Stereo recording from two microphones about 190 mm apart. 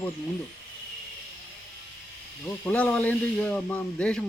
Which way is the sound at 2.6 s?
5° left (ahead or behind).